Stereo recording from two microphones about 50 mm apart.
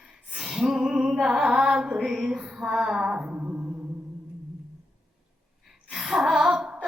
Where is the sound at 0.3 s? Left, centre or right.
Centre.